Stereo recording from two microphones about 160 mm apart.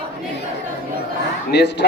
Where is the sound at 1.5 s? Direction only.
90° left.